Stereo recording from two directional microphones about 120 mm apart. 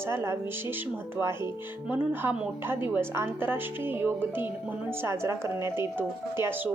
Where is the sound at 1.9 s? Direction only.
15° right (ahead or behind).